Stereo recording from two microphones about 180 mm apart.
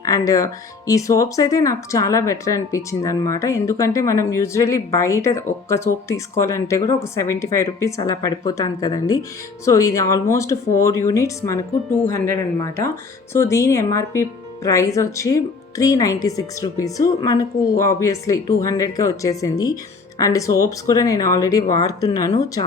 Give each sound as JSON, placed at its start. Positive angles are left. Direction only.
{"t": 0.0, "sound": "a woman's voice", "side_deg": 20}